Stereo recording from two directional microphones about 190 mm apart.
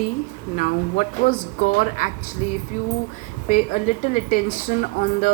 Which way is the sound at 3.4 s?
40° left (ahead or behind).